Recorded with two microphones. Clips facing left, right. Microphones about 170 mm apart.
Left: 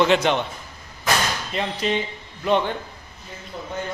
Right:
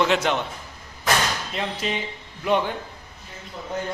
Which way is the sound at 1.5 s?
5° right (ahead or behind).